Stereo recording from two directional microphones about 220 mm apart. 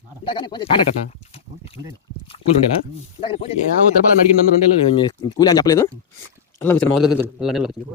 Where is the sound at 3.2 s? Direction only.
25° left (ahead or behind).